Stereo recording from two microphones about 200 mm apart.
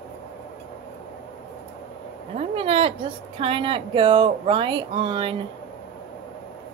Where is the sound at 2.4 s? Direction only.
30° right (ahead or behind).